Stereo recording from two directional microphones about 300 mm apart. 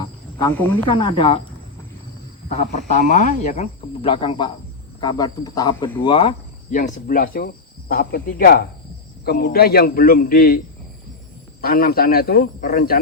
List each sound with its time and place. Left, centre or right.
0.0 s speech: centre
2.5 s a man's voice: left
11.6 s speech: left